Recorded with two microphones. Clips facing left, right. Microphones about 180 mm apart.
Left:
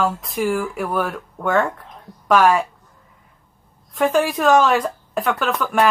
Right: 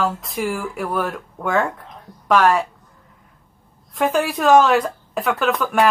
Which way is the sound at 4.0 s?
Centre (ahead or behind).